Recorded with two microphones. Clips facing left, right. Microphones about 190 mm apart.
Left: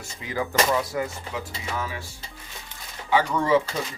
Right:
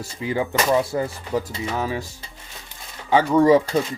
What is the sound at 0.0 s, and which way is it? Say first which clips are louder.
Speech: right 5 dB; 30° right (ahead or behind).